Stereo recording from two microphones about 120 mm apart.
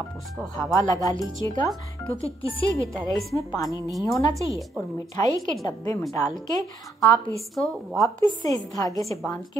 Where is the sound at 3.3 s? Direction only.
30° left (ahead or behind).